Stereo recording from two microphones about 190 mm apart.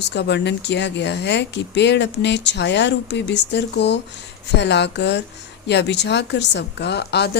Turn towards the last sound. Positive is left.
turn(degrees=60)  # may be behind; listen again after turning